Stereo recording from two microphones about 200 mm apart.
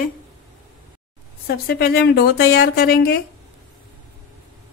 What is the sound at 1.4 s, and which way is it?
Speech, 50° left (ahead or behind).